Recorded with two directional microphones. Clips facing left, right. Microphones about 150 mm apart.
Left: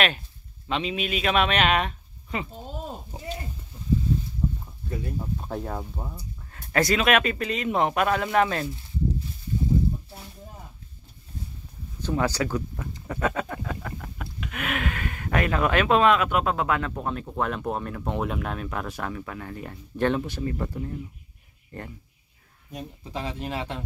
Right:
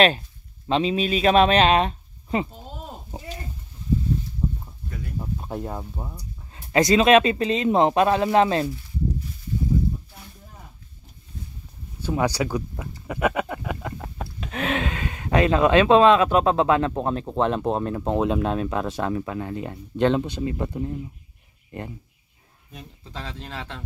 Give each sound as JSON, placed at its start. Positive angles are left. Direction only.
{"t": 0.7, "sound": "speech", "side_deg": -35}
{"t": 4.8, "sound": "a sound", "side_deg": 25}
{"t": 5.2, "sound": "speech", "side_deg": -5}
{"t": 6.5, "sound": "speech", "side_deg": -20}
{"t": 12.0, "sound": "speech", "side_deg": -15}
{"t": 22.7, "sound": "speech", "side_deg": 15}